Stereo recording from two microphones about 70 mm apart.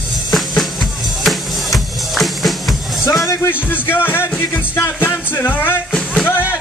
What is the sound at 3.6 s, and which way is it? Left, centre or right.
Speech, left.